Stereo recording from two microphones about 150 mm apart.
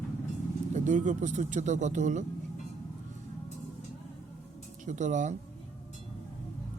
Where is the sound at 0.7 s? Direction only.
55° right (ahead or behind).